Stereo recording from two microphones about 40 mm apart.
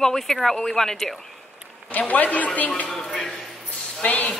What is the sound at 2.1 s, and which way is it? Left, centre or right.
Speech, left.